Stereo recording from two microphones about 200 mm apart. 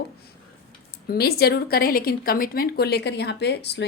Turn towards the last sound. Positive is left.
turn(degrees=55)  # may be behind; listen again after turning